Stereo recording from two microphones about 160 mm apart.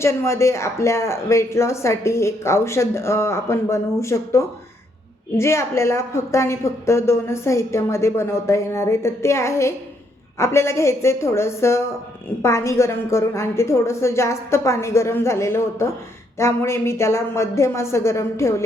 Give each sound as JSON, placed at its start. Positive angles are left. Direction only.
{"t": 0.0, "sound": "speech", "side_deg": 15}